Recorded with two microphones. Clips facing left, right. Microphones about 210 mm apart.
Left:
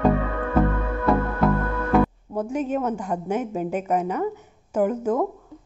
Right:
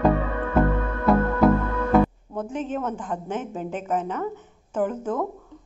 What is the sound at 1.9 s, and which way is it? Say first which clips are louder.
A woman's voice: even; 5° left (ahead or behind).